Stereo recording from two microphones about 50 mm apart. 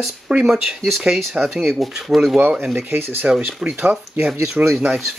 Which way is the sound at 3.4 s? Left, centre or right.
Right.